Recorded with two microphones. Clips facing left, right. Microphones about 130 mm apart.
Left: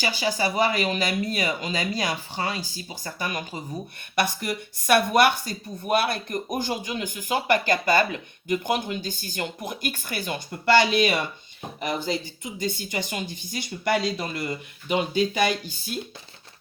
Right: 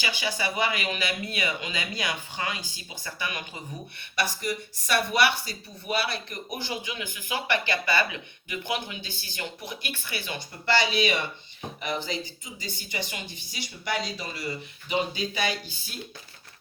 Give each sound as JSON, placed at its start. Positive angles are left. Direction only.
{"t": 0.0, "sound": "speech", "side_deg": 40}
{"t": 4.1, "sound": "speech", "side_deg": 55}